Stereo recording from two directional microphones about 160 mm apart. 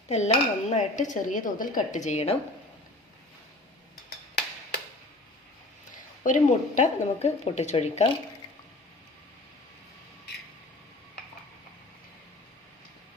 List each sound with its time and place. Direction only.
0.1 s dishes: 45° left (ahead or behind)
6.2 s dishes: 50° left (ahead or behind)